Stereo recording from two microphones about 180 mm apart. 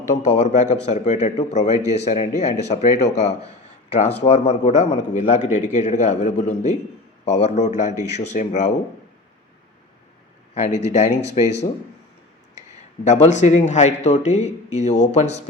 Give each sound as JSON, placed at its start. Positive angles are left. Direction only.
{"t": 0.1, "sound": "a man's voice", "side_deg": 40}
{"t": 10.5, "sound": "a man's voice", "side_deg": 40}
{"t": 13.1, "sound": "a man's voice", "side_deg": 40}